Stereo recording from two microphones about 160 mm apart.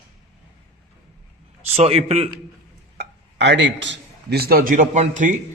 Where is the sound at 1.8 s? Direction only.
40° right (ahead or behind).